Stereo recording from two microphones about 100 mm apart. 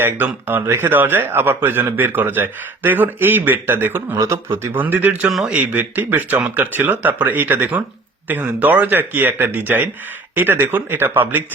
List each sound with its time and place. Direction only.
0.0 s a man's voice: 20° right (ahead or behind)